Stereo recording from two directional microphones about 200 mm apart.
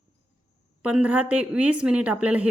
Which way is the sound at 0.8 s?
5° right (ahead or behind).